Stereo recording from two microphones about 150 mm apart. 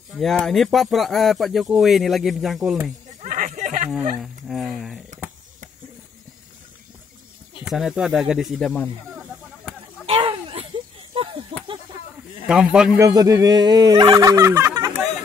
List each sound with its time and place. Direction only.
0.1 s speech: centre (ahead or behind)
3.2 s a sound: 60° right (ahead or behind)
3.9 s speech: centre (ahead or behind)
7.6 s speech: centre (ahead or behind)
10.0 s a sound: 35° right (ahead or behind)
12.4 s speech: 5° right (ahead or behind)
13.0 s speech: 25° right (ahead or behind)